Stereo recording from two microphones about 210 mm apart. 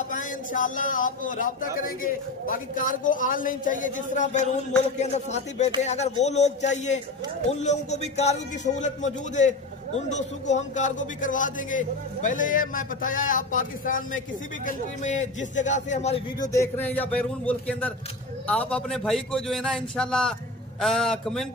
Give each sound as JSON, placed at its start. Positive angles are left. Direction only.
{"t": 0.1, "sound": "a man's voice", "side_deg": 40}
{"t": 16.3, "sound": "a man's voice", "side_deg": 10}